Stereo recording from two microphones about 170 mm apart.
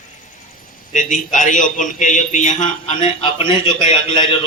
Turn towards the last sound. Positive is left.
turn(degrees=30)  # may be behind; listen again after turning